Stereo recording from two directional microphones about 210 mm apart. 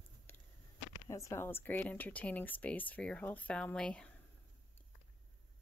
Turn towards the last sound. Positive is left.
turn(degrees=5)  # may be behind; listen again after turning